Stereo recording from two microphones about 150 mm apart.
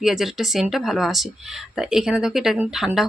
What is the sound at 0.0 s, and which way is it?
Speech, centre (ahead or behind).